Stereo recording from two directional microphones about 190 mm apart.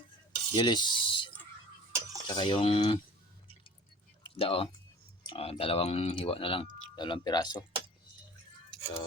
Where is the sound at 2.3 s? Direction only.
25° left (ahead or behind).